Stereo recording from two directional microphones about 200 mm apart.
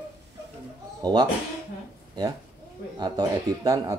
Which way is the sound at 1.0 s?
20° right (ahead or behind).